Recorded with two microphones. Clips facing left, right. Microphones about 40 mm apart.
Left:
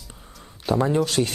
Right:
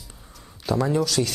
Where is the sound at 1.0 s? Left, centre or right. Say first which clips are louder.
Left 1 dB; left.